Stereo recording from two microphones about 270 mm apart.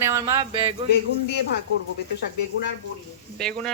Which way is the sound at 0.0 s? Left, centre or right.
Centre.